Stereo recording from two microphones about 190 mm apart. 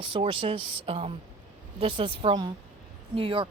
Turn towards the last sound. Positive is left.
turn(degrees=-30)  # may be behind; listen again after turning